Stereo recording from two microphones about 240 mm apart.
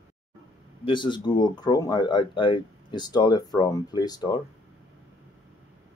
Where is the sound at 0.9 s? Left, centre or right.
Centre.